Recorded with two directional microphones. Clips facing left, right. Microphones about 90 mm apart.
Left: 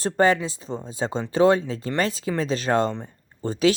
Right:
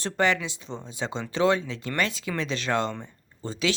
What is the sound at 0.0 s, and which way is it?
Speech, 35° left (ahead or behind).